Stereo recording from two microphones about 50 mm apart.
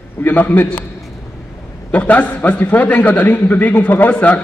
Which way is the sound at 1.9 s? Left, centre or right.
Left.